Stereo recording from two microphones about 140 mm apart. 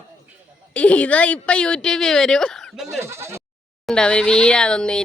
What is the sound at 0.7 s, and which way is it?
Speech, 10° left (ahead or behind).